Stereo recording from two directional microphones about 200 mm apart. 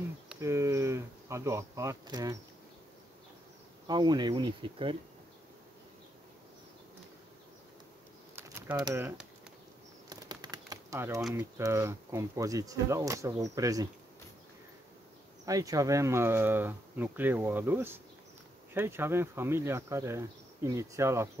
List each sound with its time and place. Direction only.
0.4 s insect: 15° right (ahead or behind)
3.8 s speech: 20° right (ahead or behind)
8.4 s pigeon: 10° right (ahead or behind)
8.8 s speech: 15° right (ahead or behind)
10.0 s a sound: 20° right (ahead or behind)
11.2 s speech: 10° right (ahead or behind)
15.4 s speech: 15° right (ahead or behind)